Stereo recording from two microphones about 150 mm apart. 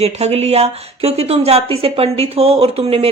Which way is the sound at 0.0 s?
45° right (ahead or behind).